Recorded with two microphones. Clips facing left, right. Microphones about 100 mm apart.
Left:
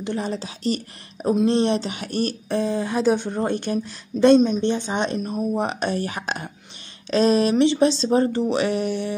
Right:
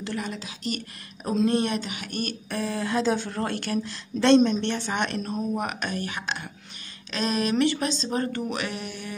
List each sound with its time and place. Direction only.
0.0 s speech: 30° left (ahead or behind)
1.3 s speech: 25° left (ahead or behind)
2.5 s a woman's voice: 20° left (ahead or behind)
4.3 s speech: 10° left (ahead or behind)
5.6 s speech: 30° left (ahead or behind)